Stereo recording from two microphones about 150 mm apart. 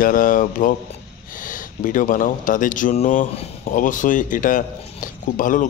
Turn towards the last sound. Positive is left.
turn(degrees=60)  # may be behind; listen again after turning